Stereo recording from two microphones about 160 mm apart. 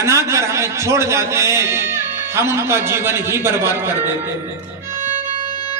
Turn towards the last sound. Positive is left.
turn(degrees=-15)  # may be behind; listen again after turning